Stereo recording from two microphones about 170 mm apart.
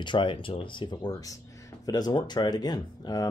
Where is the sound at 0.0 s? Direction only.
30° left (ahead or behind).